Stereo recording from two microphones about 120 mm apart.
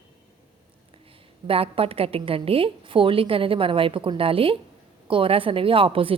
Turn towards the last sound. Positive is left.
turn(degrees=-50)  # may be behind; listen again after turning